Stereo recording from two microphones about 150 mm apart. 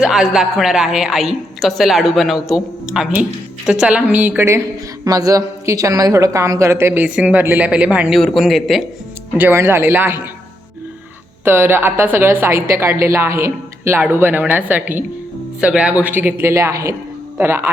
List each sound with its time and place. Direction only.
0.0 s a woman's voice: 5° right (ahead or behind)
9.4 s speech: 15° right (ahead or behind)
11.4 s speech: 15° right (ahead or behind)